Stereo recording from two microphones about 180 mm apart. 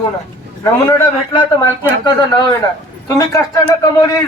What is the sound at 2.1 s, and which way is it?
Speech, 25° left (ahead or behind).